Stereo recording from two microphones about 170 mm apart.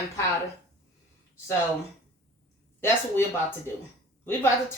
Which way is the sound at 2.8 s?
15° left (ahead or behind).